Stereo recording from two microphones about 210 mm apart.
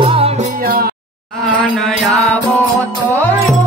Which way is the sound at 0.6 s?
45° right (ahead or behind).